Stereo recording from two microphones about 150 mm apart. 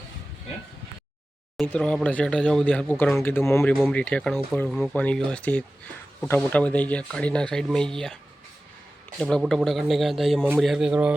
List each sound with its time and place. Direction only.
1.5 s speech: 5° left (ahead or behind)
3.2 s speech: 15° left (ahead or behind)
3.6 s a man's voice: 5° left (ahead or behind)